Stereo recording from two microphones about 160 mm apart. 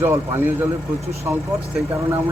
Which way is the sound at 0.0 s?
15° right (ahead or behind).